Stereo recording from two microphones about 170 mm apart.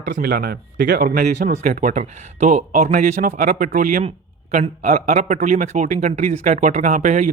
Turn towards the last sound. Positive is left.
turn(degrees=-45)  # may be behind; listen again after turning